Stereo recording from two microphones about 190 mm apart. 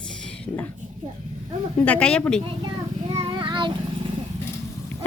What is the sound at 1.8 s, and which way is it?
Speech, 5° left (ahead or behind).